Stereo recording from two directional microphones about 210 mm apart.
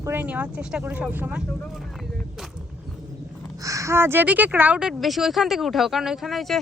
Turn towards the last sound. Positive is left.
turn(degrees=0)  # may be behind; listen again after turning